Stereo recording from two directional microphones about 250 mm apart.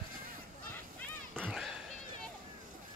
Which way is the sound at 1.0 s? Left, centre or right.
Centre.